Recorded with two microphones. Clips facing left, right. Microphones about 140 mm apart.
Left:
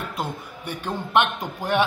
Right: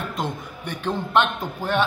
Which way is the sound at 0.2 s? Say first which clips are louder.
Right 1 dB; 10° left (ahead or behind).